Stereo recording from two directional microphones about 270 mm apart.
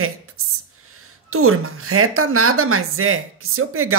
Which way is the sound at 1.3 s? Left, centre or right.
Right.